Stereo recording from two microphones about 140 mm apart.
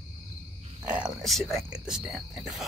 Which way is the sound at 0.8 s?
5° right (ahead or behind).